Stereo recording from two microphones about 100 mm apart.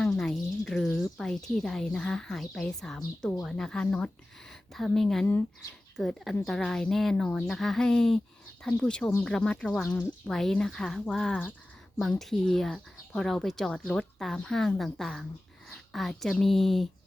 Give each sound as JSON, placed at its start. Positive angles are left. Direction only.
{"t": 0.0, "sound": "speech", "side_deg": 5}